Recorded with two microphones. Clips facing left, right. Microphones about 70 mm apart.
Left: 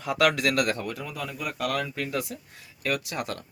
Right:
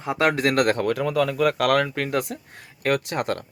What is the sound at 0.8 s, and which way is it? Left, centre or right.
Speech, right.